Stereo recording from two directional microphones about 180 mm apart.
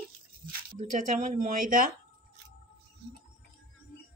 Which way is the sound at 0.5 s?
45° right (ahead or behind).